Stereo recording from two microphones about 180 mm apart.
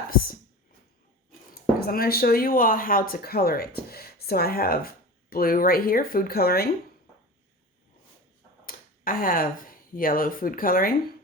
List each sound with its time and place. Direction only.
0.1 s speech: 55° left (ahead or behind)
1.8 s speech: 55° left (ahead or behind)
8.6 s speech: 50° left (ahead or behind)